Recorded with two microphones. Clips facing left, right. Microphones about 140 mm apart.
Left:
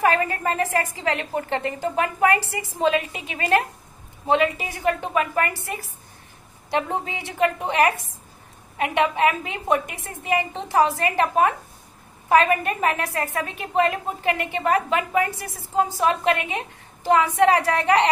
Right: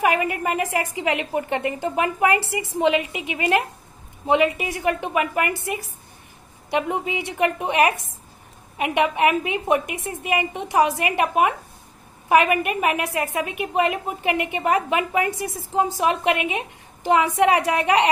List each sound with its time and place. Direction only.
0.0 s a woman's voice: 15° right (ahead or behind)